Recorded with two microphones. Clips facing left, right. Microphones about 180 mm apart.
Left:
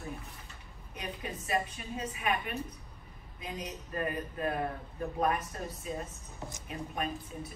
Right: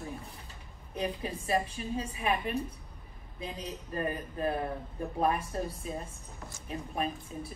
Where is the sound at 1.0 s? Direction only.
30° right (ahead or behind).